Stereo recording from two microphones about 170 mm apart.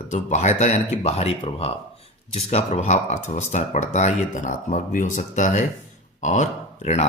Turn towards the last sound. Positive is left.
turn(degrees=40)  # may be behind; listen again after turning